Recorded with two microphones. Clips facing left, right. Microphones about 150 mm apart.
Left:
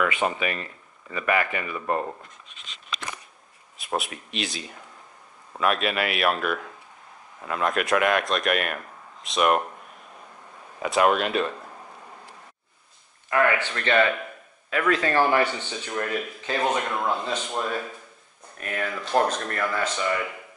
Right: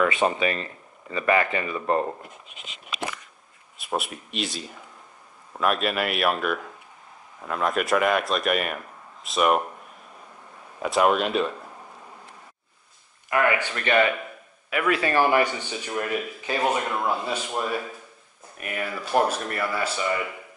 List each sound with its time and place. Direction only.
0.0 s speech: 30° right (ahead or behind)
3.7 s a man's voice: centre (ahead or behind)
10.8 s a man's voice: centre (ahead or behind)
13.3 s a man's voice: 10° right (ahead or behind)